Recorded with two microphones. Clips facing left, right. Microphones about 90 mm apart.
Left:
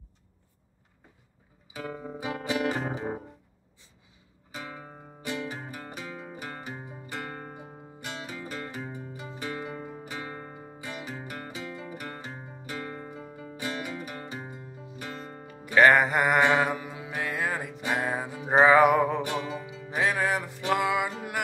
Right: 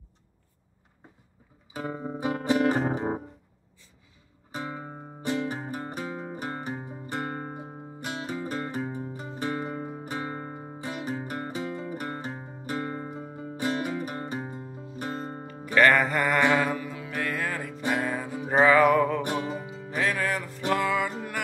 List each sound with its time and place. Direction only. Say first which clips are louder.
1.7 s music: right 3 dB; 30° right (ahead or behind)
2.1 s music: right 5 dB; 40° right (ahead or behind)
4.5 s music: right 5 dB; 35° right (ahead or behind)
15.4 s music: left 1 dB; 15° left (ahead or behind)
19.2 s music: right 2 dB; 40° right (ahead or behind)
20.0 s music: left 1 dB; 15° left (ahead or behind)